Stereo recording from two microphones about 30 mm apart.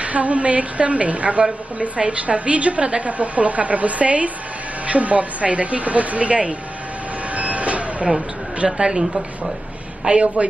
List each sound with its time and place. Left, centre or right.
0.0 s a woman's voice: right
7.3 s vehicle: right
8.7 s a woman's voice: right
10.2 s a woman's voice: right